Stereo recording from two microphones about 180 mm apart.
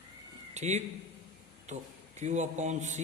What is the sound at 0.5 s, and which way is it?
A man's voice, 40° right (ahead or behind).